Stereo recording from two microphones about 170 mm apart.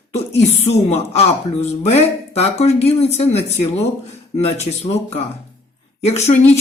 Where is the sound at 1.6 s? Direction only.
40° left (ahead or behind).